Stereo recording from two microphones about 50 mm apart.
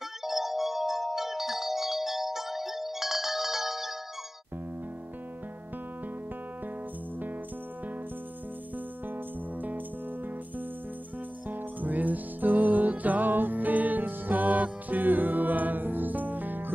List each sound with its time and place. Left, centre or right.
0.2 s music: centre
8.7 s music: right
11.4 s music: right